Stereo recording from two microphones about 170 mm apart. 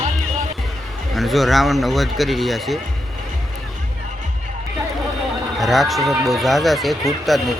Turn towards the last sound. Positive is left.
turn(degrees=0)  # may be behind; listen again after turning